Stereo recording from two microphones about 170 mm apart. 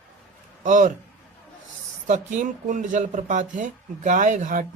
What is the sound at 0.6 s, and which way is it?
Speech, 50° right (ahead or behind).